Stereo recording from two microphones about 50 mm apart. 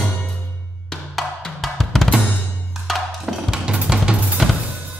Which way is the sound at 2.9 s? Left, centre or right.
Centre.